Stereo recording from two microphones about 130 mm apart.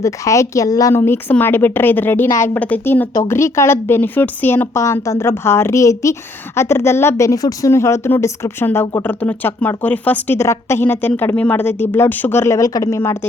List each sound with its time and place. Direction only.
0.0 s a woman's voice: 25° left (ahead or behind)
2.6 s a woman's voice: 10° left (ahead or behind)